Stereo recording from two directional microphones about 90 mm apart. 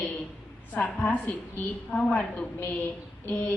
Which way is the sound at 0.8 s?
15° left (ahead or behind).